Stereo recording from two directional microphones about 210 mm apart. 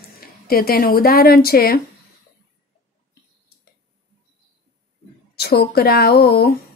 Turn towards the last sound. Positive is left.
turn(degrees=50)  # may be behind; listen again after turning